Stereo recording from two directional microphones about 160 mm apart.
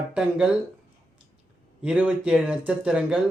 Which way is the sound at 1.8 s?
5° right (ahead or behind).